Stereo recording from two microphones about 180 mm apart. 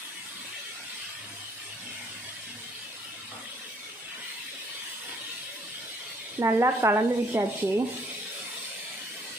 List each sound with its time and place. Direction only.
6.4 s speech: 15° right (ahead or behind)